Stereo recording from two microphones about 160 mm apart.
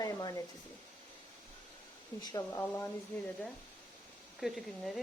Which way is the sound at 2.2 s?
25° left (ahead or behind).